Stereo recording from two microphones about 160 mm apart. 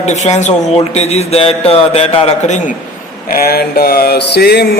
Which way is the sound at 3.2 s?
75° left (ahead or behind).